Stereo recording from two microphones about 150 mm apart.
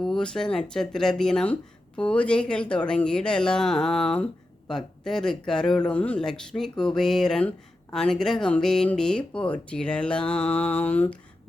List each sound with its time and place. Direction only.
0.0 s speech: 5° left (ahead or behind)